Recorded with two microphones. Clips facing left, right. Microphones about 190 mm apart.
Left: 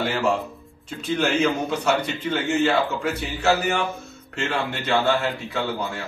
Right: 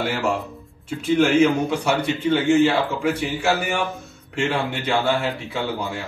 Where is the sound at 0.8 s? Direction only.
5° right (ahead or behind).